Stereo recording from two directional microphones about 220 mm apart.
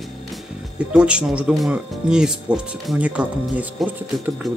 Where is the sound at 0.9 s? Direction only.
5° right (ahead or behind).